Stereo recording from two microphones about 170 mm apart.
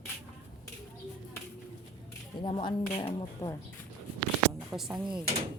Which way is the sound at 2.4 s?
30° left (ahead or behind).